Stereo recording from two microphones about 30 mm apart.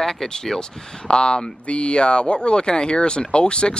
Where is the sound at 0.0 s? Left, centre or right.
Centre.